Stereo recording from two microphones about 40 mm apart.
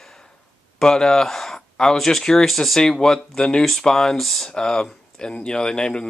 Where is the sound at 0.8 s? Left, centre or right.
Centre.